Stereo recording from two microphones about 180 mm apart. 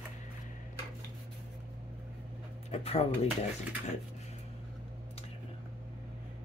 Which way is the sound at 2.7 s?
35° left (ahead or behind).